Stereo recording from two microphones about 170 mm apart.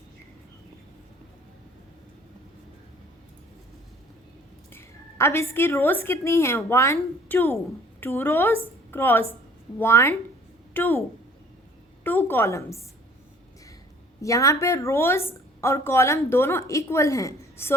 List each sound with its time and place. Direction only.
4.7 s a woman's voice: 15° left (ahead or behind)
12.0 s a woman's voice: 10° left (ahead or behind)
14.2 s a woman's voice: 20° left (ahead or behind)